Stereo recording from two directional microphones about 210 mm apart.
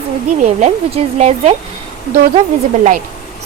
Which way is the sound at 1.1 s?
30° right (ahead or behind).